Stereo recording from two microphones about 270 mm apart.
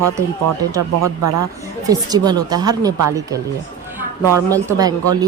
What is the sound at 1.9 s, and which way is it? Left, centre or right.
A woman's voice, centre.